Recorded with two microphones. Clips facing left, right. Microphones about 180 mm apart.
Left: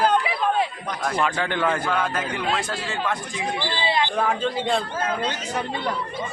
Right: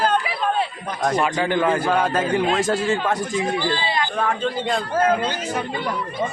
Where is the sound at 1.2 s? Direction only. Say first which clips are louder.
Right 2 dB; 10° right (ahead or behind).